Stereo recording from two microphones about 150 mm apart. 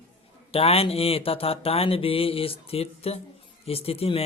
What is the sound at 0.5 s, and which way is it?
Speech, 40° left (ahead or behind).